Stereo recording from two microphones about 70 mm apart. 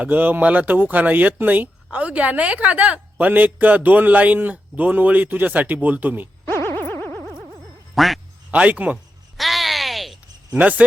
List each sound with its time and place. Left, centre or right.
0.0 s speech: right
6.7 s boing: left
7.9 s speech: centre
8.4 s a man's voice: centre
9.4 s a sound: centre
10.5 s speech: right